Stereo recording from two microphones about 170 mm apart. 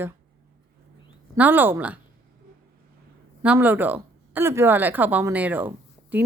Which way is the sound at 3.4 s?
10° right (ahead or behind).